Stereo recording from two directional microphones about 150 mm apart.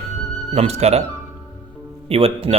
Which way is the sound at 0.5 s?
45° right (ahead or behind).